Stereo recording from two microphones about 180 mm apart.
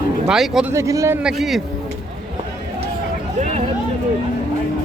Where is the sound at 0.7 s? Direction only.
15° right (ahead or behind).